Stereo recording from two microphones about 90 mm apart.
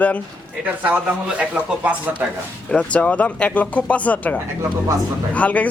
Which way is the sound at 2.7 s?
15° left (ahead or behind).